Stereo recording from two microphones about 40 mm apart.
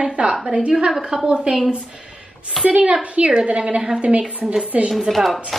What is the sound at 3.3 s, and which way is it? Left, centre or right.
A woman's voice, right.